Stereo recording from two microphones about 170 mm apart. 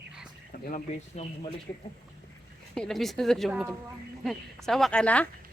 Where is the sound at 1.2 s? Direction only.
40° left (ahead or behind).